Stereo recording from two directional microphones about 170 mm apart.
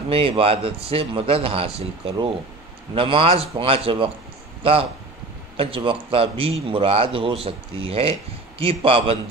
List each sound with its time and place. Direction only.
0.1 s a man's voice: 35° right (ahead or behind)
5.6 s a man's voice: 30° right (ahead or behind)